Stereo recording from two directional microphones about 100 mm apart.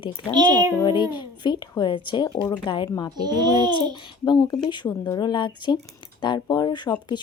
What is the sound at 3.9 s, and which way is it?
Speech, 50° left (ahead or behind).